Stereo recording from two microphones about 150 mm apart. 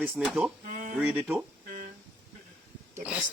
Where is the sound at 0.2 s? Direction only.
5° right (ahead or behind).